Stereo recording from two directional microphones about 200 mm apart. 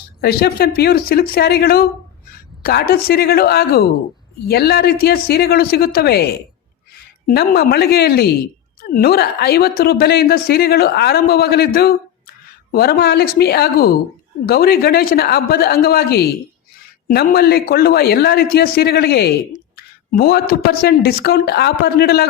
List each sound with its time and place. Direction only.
0.2 s a woman's voice: 50° left (ahead or behind)
7.3 s a woman's voice: 50° left (ahead or behind)